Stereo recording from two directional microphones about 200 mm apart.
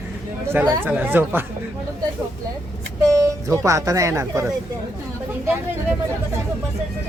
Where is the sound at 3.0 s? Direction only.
15° right (ahead or behind).